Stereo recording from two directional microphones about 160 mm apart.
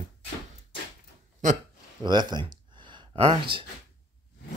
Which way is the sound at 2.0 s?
25° right (ahead or behind).